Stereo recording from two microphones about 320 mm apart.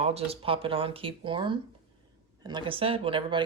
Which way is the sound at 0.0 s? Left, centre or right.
Centre.